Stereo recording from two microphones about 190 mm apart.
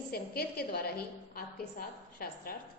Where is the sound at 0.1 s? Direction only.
55° left (ahead or behind).